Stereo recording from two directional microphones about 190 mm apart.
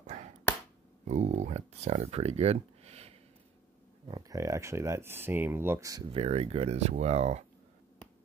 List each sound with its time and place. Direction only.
0.0 s a sound: 35° right (ahead or behind)
1.0 s speech: 35° right (ahead or behind)
4.1 s speech: 20° right (ahead or behind)
6.1 s speech: 30° right (ahead or behind)